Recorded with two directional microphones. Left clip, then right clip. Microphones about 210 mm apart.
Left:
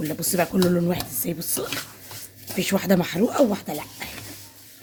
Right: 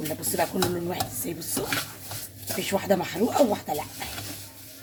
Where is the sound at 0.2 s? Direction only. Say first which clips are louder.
Left 4 dB; 50° left (ahead or behind).